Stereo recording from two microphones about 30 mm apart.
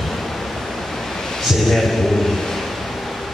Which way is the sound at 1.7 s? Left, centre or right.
Centre.